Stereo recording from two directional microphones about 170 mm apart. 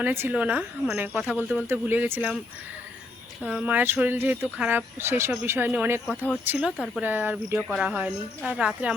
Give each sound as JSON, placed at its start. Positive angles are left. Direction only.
{"t": 0.0, "sound": "speech", "side_deg": -10}
{"t": 3.4, "sound": "speech", "side_deg": -5}
{"t": 6.1, "sound": "speech", "side_deg": 5}
{"t": 6.4, "sound": "speech", "side_deg": -10}
{"t": 6.7, "sound": "speech", "side_deg": 0}
{"t": 7.0, "sound": "speech", "side_deg": -10}